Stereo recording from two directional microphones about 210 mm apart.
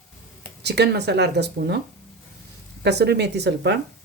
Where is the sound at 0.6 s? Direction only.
50° right (ahead or behind).